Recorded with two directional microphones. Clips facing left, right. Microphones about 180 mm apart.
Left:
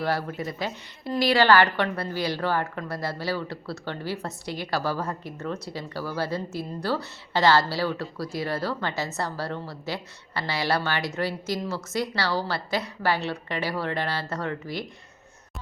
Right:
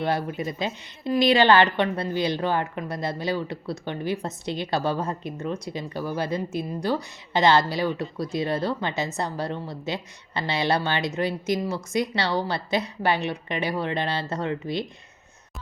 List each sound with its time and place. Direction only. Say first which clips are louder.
0.0 s a woman's voice: right 2 dB; 20° right (ahead or behind)